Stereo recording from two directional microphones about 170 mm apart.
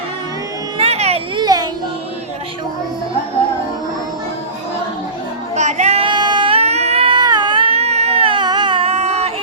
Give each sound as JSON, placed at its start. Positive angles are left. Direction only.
{"t": 0.8, "sound": "a sound", "side_deg": -40}
{"t": 1.4, "sound": "music", "side_deg": -25}
{"t": 5.5, "sound": "child singing", "side_deg": -45}